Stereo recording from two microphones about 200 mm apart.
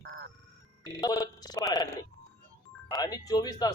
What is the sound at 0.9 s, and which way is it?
Speech, 15° left (ahead or behind).